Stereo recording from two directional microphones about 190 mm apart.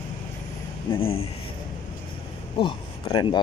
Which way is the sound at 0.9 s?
30° left (ahead or behind).